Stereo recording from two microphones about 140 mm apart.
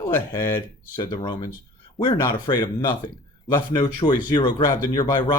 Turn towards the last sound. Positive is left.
turn(degrees=30)  # may be behind; listen again after turning